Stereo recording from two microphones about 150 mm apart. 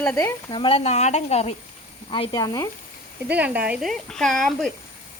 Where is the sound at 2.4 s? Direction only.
25° left (ahead or behind).